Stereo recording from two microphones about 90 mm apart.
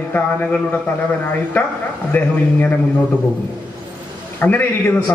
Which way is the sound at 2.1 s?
20° left (ahead or behind).